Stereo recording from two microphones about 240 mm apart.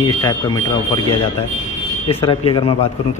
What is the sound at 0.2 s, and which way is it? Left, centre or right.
Speech, centre.